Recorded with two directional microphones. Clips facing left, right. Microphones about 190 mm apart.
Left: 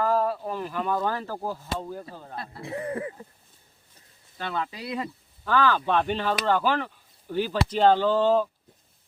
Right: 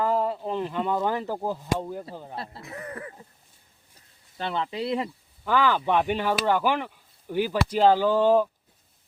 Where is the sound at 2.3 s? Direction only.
30° right (ahead or behind).